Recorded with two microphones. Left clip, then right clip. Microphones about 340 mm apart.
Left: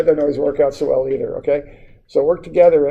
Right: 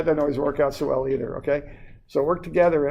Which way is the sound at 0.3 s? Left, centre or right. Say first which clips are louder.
Left 6 dB; right.